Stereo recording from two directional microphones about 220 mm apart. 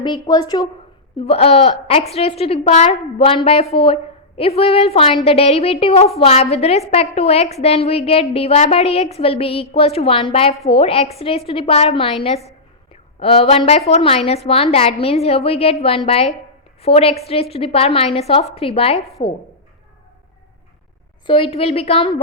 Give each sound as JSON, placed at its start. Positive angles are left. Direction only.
{"t": 0.0, "sound": "a woman's voice", "side_deg": 20}
{"t": 1.2, "sound": "a woman's voice", "side_deg": 25}
{"t": 21.2, "sound": "a woman's voice", "side_deg": 25}